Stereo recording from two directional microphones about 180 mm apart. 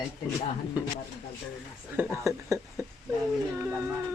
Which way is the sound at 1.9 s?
15° right (ahead or behind).